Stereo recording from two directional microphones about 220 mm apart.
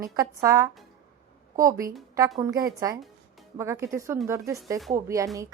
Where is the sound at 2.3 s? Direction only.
15° right (ahead or behind).